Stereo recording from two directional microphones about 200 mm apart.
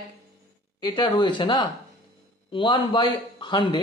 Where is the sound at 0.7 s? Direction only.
20° left (ahead or behind).